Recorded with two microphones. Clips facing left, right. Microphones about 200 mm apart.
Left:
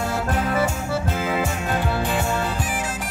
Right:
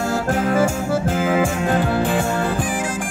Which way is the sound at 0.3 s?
45° right (ahead or behind).